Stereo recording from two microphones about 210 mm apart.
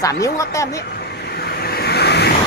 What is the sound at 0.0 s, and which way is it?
Speech, 15° left (ahead or behind).